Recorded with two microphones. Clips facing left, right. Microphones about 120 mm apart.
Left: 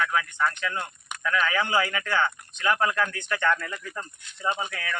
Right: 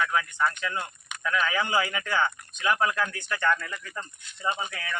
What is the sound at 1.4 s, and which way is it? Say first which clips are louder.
Speech: left 1 dB; 15° right (ahead or behind).